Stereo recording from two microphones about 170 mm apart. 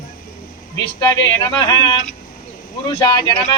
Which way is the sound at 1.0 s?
25° left (ahead or behind).